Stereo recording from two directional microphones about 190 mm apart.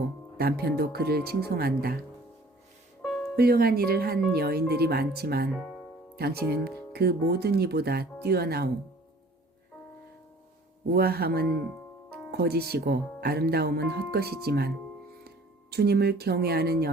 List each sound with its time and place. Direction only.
0.3 s speech: 55° right (ahead or behind)
3.0 s music: centre (ahead or behind)
3.3 s speech: 55° right (ahead or behind)
5.5 s music: centre (ahead or behind)
6.1 s speech: 55° right (ahead or behind)
10.9 s speech: 55° right (ahead or behind)
15.7 s speech: 60° right (ahead or behind)